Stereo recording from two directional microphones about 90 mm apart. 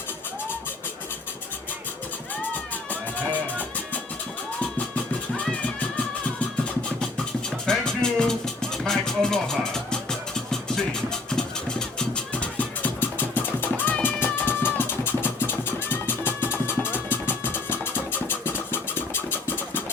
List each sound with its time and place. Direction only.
2.4 s music: 20° left (ahead or behind)
7.6 s music: 10° left (ahead or behind); by 19.8 s 25° left (ahead or behind)